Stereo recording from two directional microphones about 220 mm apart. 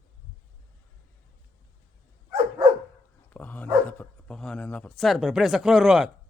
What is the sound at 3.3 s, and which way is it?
Dog, 5° left (ahead or behind).